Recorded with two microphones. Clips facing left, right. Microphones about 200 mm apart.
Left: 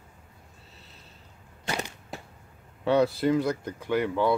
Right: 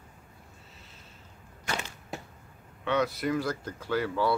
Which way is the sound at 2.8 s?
30° left (ahead or behind).